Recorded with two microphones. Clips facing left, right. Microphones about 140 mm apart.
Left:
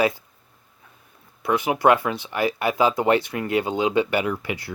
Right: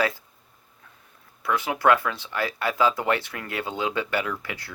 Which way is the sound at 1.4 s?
20° left (ahead or behind).